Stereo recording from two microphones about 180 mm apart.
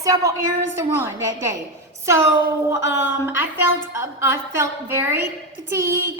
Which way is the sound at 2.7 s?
85° left.